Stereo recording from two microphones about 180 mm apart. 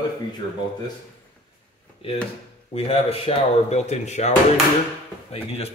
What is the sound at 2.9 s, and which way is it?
Speech, 35° left (ahead or behind).